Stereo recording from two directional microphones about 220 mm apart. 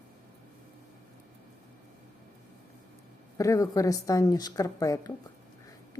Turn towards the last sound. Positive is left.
turn(degrees=15)  # may be behind; listen again after turning